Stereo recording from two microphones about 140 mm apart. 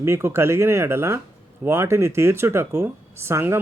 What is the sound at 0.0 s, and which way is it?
Speech, 20° right (ahead or behind).